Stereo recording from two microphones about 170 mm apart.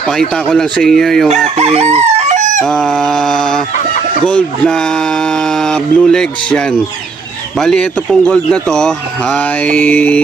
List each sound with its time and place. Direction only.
0.2 s a man's voice: 5° left (ahead or behind)
1.5 s crowing: 40° right (ahead or behind)
2.6 s a man's voice: centre (ahead or behind)
7.6 s a man's voice: 5° left (ahead or behind)